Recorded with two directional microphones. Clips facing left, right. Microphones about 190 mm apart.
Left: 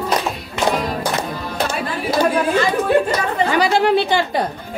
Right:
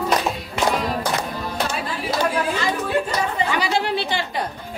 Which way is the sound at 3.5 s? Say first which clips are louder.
Left 7 dB; 45° left (ahead or behind).